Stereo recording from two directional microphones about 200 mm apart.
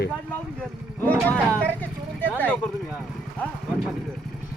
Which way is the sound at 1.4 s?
5° left (ahead or behind).